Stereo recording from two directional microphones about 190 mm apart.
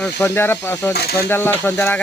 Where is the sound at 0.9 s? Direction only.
55° left (ahead or behind).